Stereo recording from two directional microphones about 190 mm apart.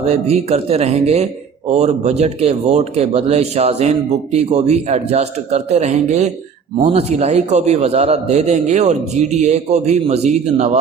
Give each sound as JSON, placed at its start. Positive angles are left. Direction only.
{"t": 0.0, "sound": "speech", "side_deg": -35}